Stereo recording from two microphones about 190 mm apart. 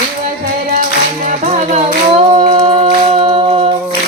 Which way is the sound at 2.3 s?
30° right (ahead or behind).